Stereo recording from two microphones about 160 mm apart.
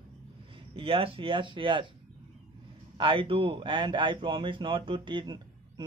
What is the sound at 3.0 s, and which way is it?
A man's voice, 30° right (ahead or behind).